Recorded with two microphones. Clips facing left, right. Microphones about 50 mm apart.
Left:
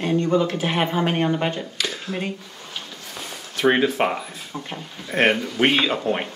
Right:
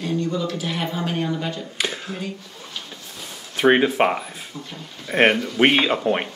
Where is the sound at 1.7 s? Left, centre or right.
Right.